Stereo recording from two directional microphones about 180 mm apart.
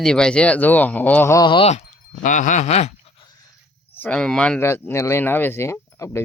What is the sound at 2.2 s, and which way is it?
Speech, 45° left (ahead or behind).